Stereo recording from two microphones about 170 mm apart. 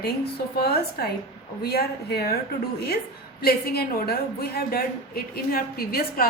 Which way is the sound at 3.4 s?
65° left (ahead or behind).